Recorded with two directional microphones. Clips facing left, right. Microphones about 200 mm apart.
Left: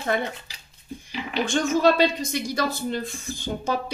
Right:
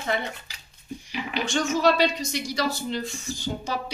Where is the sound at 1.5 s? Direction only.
50° left (ahead or behind).